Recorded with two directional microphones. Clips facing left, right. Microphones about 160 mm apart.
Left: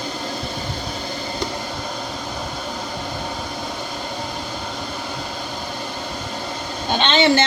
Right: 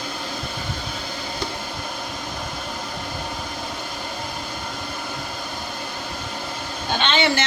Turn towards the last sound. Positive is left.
turn(degrees=25)  # may be behind; listen again after turning